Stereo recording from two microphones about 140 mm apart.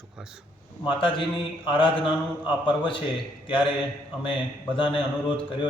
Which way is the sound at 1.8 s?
35° left (ahead or behind).